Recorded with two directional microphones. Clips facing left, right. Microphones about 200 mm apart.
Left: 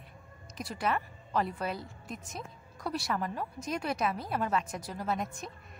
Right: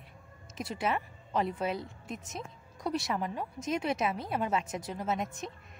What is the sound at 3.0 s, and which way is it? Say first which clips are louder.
Speech: even; 20° right (ahead or behind).